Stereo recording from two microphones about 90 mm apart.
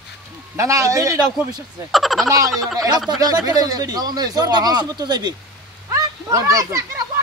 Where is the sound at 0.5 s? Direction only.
35° right (ahead or behind).